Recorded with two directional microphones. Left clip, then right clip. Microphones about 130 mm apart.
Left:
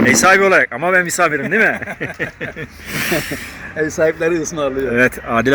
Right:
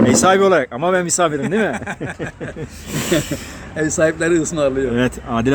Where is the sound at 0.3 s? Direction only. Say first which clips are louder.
Left 3 dB; 10° right (ahead or behind).